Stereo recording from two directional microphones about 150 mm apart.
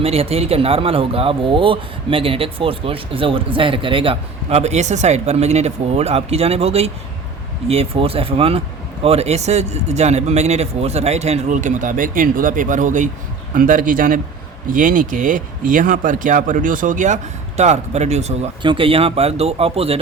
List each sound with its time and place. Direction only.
0.0 s a man's voice: 40° right (ahead or behind)
18.6 s speech: 35° right (ahead or behind)